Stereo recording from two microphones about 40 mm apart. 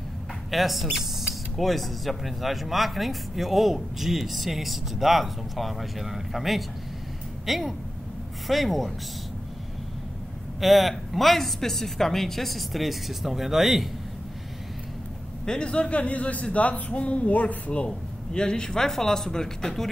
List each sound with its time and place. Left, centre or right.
0.5 s speech: centre
10.6 s speech: centre
15.4 s a man's voice: left
17.8 s a man's voice: left